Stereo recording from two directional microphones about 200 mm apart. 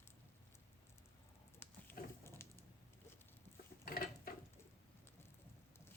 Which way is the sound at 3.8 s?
45° left (ahead or behind).